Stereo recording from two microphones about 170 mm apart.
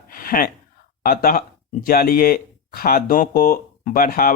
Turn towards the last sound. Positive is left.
turn(degrees=60)  # may be behind; listen again after turning